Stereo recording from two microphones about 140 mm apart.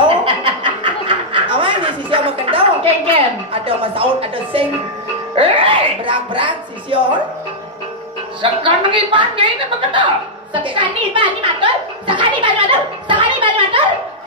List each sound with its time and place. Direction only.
0.2 s snicker: 35° right (ahead or behind)
3.6 s a woman's voice: 40° right (ahead or behind)
8.4 s a woman's voice: 35° right (ahead or behind)
12.4 s a sound: 35° right (ahead or behind)